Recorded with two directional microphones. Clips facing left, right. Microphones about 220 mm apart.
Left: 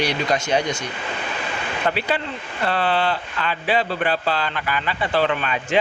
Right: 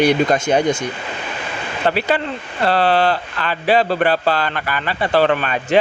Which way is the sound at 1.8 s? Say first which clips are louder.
Right 5 dB; 30° right (ahead or behind).